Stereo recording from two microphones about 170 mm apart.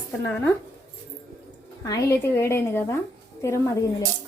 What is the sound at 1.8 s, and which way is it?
A woman's voice, 15° left (ahead or behind).